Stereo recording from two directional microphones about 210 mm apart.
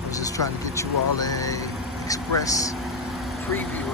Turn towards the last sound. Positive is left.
turn(degrees=10)  # may be behind; listen again after turning